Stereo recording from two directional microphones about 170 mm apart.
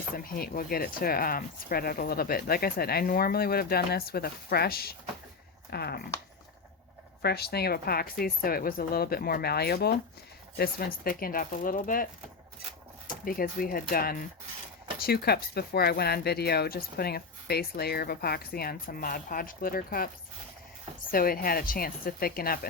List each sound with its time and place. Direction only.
0.2 s speech: 60° left (ahead or behind)
7.2 s speech: 70° left (ahead or behind); by 12.0 s 55° left (ahead or behind)
13.1 s speech: 55° left (ahead or behind)
21.1 s speech: 60° left (ahead or behind)